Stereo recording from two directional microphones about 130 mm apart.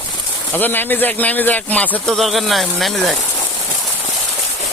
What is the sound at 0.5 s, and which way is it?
A man's voice, 15° left (ahead or behind).